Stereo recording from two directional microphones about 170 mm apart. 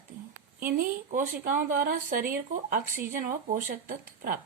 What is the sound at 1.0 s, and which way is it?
Speech, 50° right (ahead or behind).